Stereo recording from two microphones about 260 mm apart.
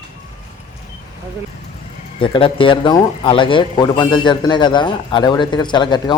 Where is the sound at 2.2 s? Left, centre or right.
Centre.